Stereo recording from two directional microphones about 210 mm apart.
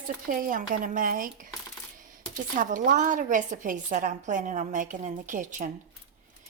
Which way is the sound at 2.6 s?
40° right (ahead or behind).